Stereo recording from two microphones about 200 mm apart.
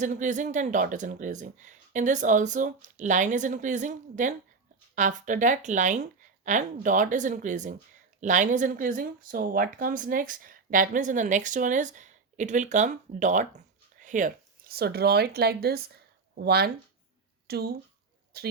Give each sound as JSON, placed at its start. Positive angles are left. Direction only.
{"t": 0.0, "sound": "speech", "side_deg": -40}